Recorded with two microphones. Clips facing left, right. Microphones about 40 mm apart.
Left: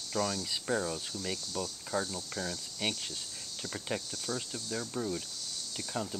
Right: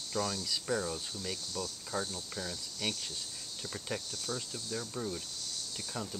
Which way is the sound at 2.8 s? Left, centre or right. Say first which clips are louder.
Left 2 dB; left.